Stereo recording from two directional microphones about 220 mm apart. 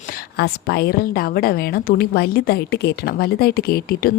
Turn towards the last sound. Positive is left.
turn(degrees=45)  # may be behind; listen again after turning